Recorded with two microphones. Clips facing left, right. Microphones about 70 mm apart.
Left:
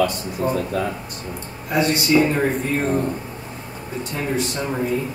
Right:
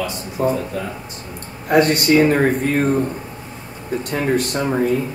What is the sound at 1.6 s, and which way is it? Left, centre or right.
Speech, right.